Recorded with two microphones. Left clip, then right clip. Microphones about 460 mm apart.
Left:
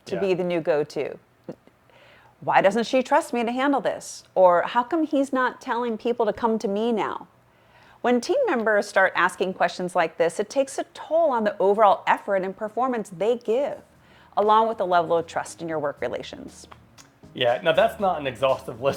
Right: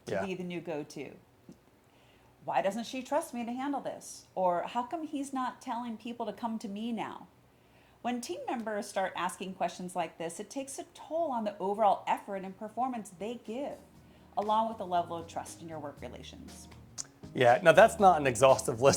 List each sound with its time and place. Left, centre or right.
0.2 s a woman's voice: left
2.5 s a woman's voice: left
17.0 s music: right
17.3 s speech: centre